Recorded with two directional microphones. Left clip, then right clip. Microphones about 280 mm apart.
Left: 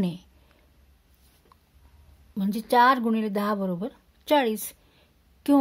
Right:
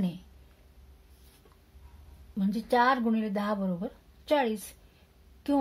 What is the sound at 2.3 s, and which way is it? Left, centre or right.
Speech, left.